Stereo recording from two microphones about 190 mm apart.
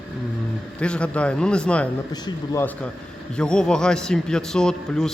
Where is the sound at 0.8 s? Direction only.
5° left (ahead or behind).